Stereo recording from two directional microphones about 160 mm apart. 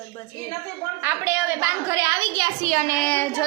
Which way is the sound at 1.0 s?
15° right (ahead or behind).